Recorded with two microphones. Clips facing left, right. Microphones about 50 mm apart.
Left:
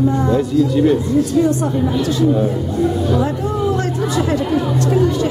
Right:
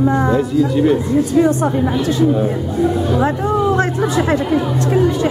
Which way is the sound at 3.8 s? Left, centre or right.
Right.